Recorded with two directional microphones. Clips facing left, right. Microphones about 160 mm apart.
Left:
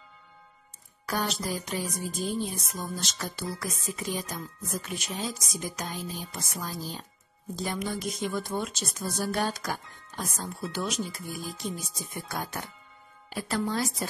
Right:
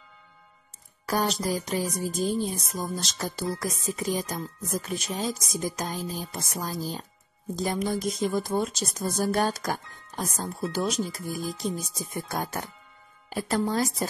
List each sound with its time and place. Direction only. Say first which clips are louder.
1.0 s a woman's voice: right 4 dB; 40° right (ahead or behind)